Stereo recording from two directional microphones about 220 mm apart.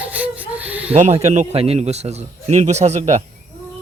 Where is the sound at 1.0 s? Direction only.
30° right (ahead or behind).